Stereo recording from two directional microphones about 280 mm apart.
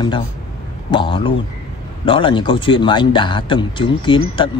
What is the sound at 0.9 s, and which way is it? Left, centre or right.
A man's voice, centre.